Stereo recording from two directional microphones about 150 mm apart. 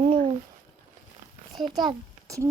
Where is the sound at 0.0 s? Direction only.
45° right (ahead or behind).